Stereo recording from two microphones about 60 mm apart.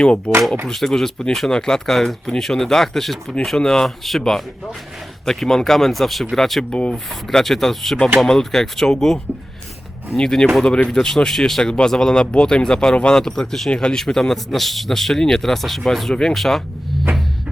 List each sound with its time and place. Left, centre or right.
0.7 s speech: centre
6.7 s speech: centre
6.9 s speech: centre
10.2 s speech: centre